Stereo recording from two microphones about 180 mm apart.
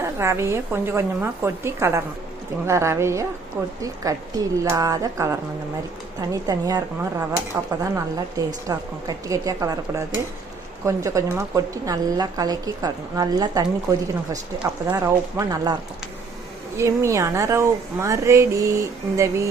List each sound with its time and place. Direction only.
0.2 s a woman's voice: 15° right (ahead or behind)
16.7 s a woman's voice: 15° right (ahead or behind)